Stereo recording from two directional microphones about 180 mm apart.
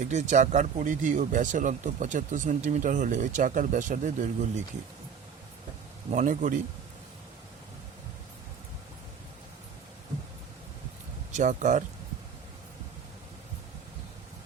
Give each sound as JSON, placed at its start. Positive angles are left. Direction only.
{"t": 0.0, "sound": "speech", "side_deg": -40}
{"t": 6.1, "sound": "speech", "side_deg": -40}
{"t": 11.3, "sound": "speech", "side_deg": -40}